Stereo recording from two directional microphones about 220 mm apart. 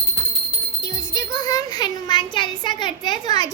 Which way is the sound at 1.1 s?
15° left (ahead or behind).